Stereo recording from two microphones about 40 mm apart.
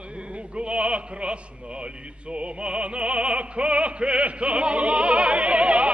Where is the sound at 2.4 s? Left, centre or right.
Right.